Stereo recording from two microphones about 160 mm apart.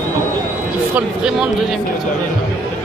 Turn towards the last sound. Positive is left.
turn(degrees=-5)  # may be behind; listen again after turning